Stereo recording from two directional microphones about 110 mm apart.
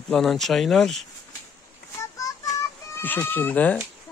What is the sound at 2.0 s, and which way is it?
Child singing, 30° left (ahead or behind).